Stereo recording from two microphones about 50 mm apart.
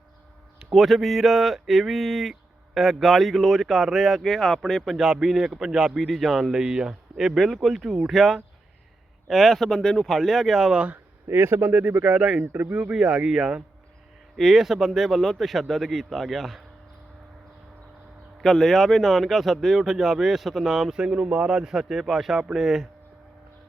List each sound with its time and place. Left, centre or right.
0.7 s a man's voice: centre
4.9 s a man's voice: centre
10.7 s speech: right
11.3 s speech: right
11.7 s speech: right
12.1 s a man's voice: centre
12.4 s speech: right
12.6 s speech: right
13.3 s a man's voice: centre
18.4 s a man's voice: centre
20.9 s a man's voice: centre